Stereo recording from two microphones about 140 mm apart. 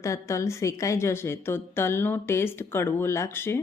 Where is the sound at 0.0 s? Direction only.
20° left (ahead or behind).